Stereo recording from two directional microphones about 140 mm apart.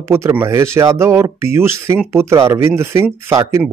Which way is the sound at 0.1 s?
15° right (ahead or behind).